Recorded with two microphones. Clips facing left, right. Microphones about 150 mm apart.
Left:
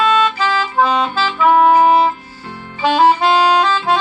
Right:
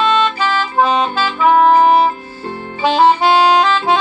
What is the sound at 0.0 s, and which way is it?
Music, 10° left (ahead or behind).